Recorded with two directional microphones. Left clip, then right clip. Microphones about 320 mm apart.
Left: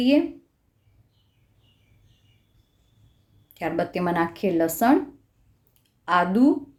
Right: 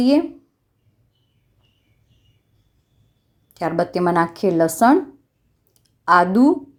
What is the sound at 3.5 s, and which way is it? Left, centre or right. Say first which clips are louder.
A woman's voice: right 5 dB; centre.